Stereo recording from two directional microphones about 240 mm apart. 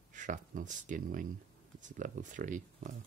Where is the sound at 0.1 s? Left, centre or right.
Right.